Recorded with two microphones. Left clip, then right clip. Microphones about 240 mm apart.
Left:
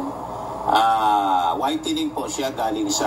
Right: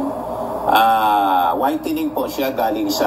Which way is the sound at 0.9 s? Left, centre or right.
Right.